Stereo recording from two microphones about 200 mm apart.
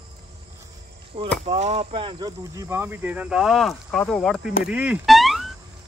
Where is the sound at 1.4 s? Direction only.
35° right (ahead or behind); by 5.5 s centre (ahead or behind).